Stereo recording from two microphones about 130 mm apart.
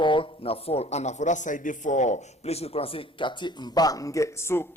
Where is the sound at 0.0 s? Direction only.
40° left (ahead or behind).